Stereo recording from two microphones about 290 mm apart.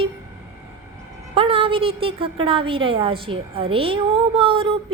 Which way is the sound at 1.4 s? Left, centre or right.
Centre.